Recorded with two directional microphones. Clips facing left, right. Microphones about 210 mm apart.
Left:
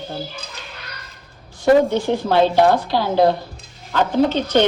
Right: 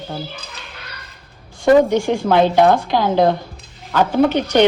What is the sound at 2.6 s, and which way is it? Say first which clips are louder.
Speech: right 2 dB; 50° right (ahead or behind).